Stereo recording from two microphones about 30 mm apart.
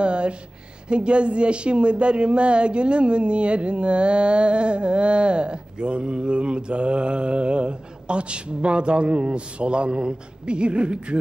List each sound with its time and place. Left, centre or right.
0.0 s music: right
0.8 s speech: right